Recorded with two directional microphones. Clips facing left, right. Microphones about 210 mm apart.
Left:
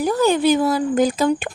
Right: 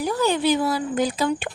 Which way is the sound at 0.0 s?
45° left (ahead or behind).